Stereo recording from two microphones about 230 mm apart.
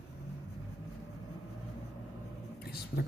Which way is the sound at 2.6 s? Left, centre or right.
Left.